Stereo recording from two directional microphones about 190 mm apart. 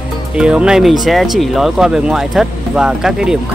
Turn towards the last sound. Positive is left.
turn(degrees=-5)  # may be behind; listen again after turning